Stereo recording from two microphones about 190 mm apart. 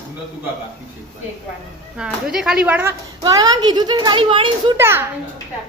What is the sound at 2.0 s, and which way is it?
Speech, 5° right (ahead or behind).